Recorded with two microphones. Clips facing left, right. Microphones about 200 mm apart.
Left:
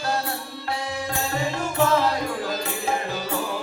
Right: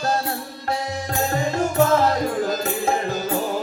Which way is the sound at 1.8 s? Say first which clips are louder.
Right 3 dB; 45° right (ahead or behind).